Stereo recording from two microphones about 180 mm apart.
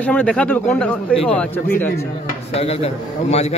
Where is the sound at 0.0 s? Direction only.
10° left (ahead or behind).